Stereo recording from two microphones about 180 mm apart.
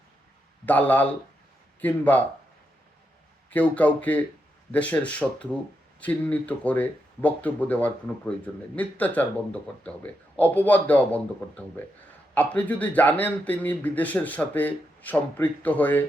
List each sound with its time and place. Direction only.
0.6 s speech: 10° left (ahead or behind)
3.5 s speech: 10° left (ahead or behind)